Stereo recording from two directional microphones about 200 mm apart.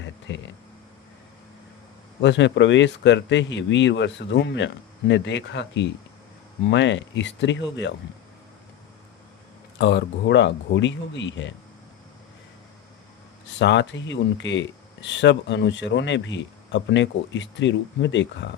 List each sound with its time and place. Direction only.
0.3 s speech: 65° left (ahead or behind)
2.2 s speech: 65° left (ahead or behind)
9.7 s speech: 60° left (ahead or behind)
13.6 s speech: 60° left (ahead or behind)